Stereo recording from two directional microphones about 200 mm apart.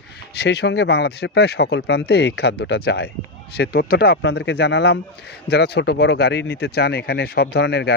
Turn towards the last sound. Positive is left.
turn(degrees=55)  # may be behind; listen again after turning